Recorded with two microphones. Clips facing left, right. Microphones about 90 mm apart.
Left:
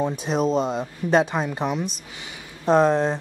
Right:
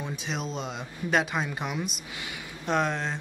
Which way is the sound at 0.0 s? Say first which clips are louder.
Left 11 dB; 45° left (ahead or behind).